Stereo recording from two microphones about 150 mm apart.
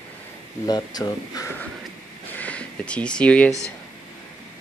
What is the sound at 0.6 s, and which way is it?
Speech, 25° left (ahead or behind).